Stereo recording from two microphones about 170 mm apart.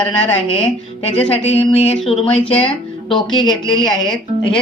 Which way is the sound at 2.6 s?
5° left (ahead or behind).